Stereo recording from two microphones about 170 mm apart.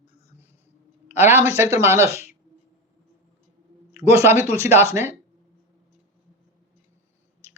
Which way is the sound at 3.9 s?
15° right (ahead or behind).